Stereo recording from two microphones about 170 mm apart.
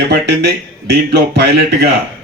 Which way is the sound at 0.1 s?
75° right (ahead or behind).